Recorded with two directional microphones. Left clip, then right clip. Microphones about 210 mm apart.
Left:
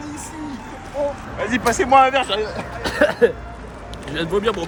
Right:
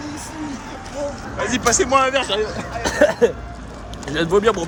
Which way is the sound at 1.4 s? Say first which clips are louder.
Right 1 dB; 40° left (ahead or behind).